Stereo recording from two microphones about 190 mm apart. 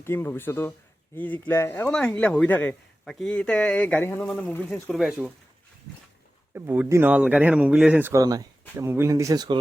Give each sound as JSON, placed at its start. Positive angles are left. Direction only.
{"t": 0.0, "sound": "speech", "side_deg": 15}
{"t": 6.5, "sound": "speech", "side_deg": -10}